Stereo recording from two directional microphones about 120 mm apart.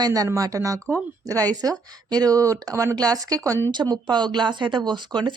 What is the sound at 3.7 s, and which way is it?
Speech, 35° right (ahead or behind).